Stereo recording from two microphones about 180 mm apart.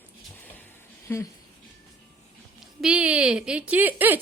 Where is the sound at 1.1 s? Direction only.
15° left (ahead or behind).